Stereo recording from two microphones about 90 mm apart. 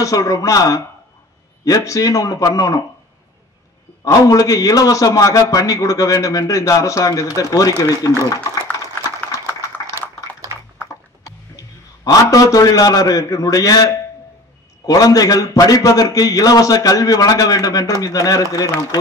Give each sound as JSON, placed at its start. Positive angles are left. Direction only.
{"t": 0.0, "sound": "a man's voice", "side_deg": 40}
{"t": 4.0, "sound": "a man's voice", "side_deg": 35}
{"t": 8.1, "sound": "speech", "side_deg": 20}
{"t": 11.2, "sound": "a man's voice", "side_deg": 40}